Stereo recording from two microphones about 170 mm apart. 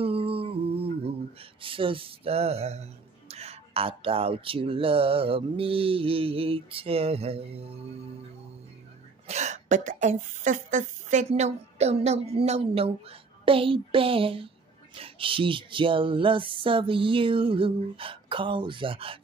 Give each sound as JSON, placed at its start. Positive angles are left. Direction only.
{"t": 0.0, "sound": "a sound", "side_deg": -35}
{"t": 1.6, "sound": "speech", "side_deg": -30}
{"t": 9.3, "sound": "speech", "side_deg": -45}